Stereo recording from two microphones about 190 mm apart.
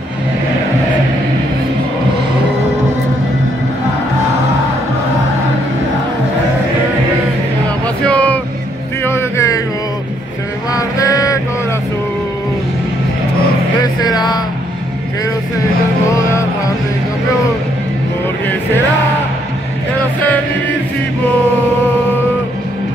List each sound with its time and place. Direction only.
8.0 s a sound: 5° left (ahead or behind)
9.0 s music: 15° left (ahead or behind)
10.7 s music: 15° left (ahead or behind)
14.0 s vehicle: 20° left (ahead or behind)